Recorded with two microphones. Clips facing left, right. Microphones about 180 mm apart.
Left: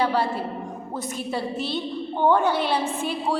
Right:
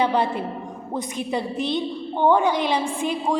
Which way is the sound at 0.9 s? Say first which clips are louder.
Right 3 dB; 15° right (ahead or behind).